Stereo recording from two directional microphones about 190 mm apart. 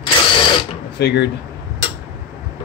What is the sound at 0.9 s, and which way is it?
Speech, 65° left (ahead or behind).